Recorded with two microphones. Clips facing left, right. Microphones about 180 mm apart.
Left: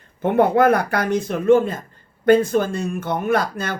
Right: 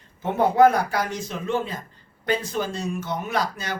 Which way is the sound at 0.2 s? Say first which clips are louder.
Left 2 dB; 60° left (ahead or behind).